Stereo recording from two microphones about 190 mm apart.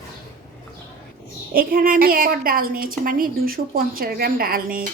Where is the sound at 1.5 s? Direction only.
50° right (ahead or behind).